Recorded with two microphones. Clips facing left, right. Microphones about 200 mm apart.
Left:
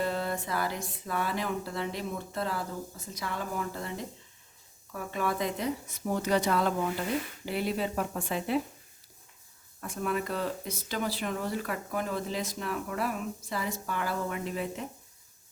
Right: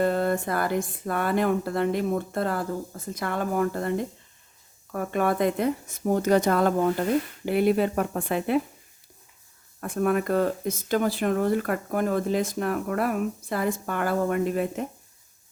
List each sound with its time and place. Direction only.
0.0 s speech: 50° right (ahead or behind)
9.8 s speech: 55° right (ahead or behind)